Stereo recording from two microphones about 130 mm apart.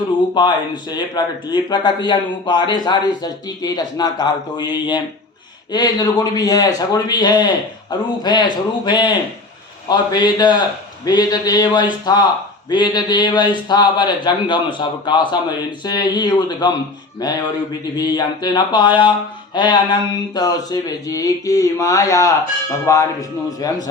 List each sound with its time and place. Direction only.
0.9 s a man's voice: 30° left (ahead or behind)